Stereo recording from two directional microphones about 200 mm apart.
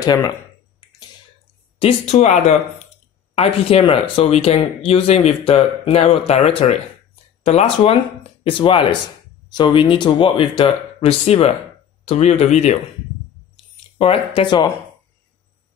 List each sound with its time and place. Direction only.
0.0 s speech: 20° left (ahead or behind)
1.8 s speech: 30° left (ahead or behind)
13.9 s speech: 25° left (ahead or behind)